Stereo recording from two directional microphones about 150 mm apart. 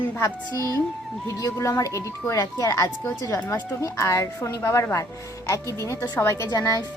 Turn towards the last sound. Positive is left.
turn(degrees=20)  # may be behind; listen again after turning